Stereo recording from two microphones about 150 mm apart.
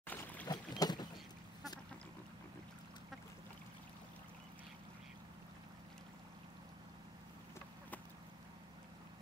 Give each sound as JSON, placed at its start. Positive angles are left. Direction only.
{"t": 0.0, "sound": "boat", "side_deg": 10}
{"t": 0.5, "sound": "boat", "side_deg": 30}